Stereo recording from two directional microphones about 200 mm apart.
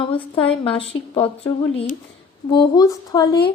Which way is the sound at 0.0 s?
25° left (ahead or behind).